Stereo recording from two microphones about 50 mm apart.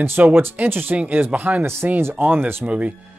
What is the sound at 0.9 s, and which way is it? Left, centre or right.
Speech, right.